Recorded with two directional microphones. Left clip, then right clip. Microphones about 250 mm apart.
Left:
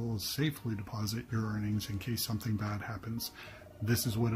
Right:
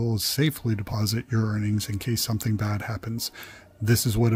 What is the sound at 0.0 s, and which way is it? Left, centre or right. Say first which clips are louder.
Speech: right 10 dB; right.